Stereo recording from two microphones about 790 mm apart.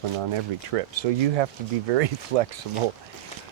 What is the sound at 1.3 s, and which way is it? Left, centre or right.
Speech, right.